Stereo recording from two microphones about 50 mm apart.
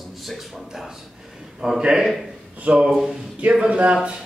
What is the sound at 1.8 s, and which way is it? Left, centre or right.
Speech, centre.